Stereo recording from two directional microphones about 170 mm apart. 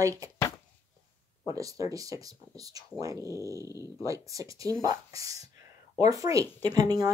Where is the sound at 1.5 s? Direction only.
20° right (ahead or behind).